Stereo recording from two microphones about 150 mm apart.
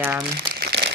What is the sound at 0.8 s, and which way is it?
Crumpling, 90° right.